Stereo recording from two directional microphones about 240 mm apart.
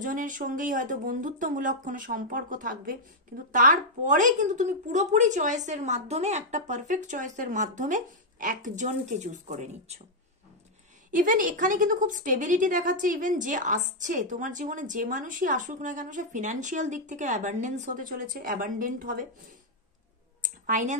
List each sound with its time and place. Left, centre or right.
0.0 s a woman's voice: right
11.1 s a woman's voice: right
20.4 s a sound: right